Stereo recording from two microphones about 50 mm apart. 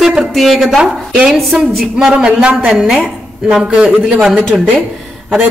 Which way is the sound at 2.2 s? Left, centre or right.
Right.